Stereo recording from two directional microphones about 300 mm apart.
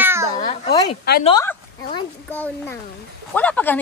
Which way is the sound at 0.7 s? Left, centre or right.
Centre.